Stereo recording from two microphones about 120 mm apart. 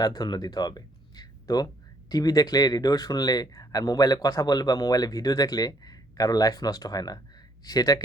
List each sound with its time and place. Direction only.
0.0 s speech: 35° left (ahead or behind)